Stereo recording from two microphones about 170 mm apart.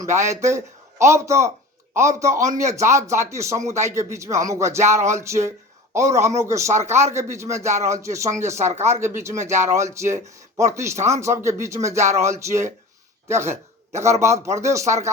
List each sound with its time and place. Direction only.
0.0 s speech: 15° right (ahead or behind)
10.9 s speech: 40° right (ahead or behind)
11.2 s a man's voice: 15° right (ahead or behind)